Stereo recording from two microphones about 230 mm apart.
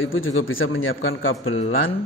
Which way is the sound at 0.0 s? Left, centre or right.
Left.